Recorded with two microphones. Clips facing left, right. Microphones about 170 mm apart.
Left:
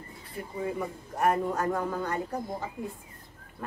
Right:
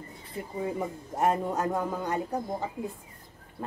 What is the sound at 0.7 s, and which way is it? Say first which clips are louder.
A woman's voice: right 1 dB; 25° right (ahead or behind).